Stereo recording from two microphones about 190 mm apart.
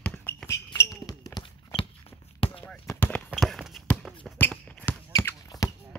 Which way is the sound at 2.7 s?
5° left (ahead or behind).